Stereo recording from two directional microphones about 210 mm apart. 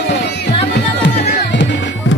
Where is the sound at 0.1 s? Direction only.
55° left (ahead or behind).